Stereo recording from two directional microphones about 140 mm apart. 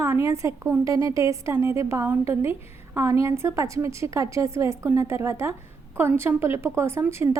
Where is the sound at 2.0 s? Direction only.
10° right (ahead or behind).